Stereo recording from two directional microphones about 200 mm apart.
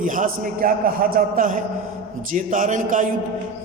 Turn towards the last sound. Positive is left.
turn(degrees=-40)  # may be behind; listen again after turning